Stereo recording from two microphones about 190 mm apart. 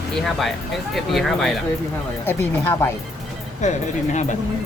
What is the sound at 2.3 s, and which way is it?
Speech, 10° left (ahead or behind).